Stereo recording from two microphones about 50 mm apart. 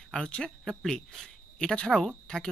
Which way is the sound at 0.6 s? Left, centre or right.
Centre.